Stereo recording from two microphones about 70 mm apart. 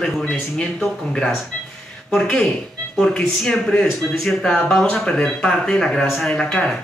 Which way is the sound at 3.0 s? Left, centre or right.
Centre.